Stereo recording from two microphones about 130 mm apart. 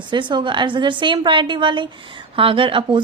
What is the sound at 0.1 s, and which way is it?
A woman's voice, 35° right (ahead or behind).